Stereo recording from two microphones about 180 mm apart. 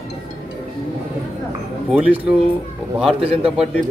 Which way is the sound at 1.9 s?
5° right (ahead or behind).